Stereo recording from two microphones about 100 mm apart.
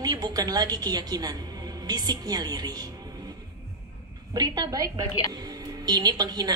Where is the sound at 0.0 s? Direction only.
40° right (ahead or behind).